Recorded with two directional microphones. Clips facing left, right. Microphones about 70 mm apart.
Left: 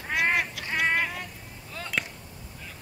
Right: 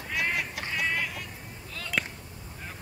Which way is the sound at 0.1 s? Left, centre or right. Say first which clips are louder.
Left 5 dB; left.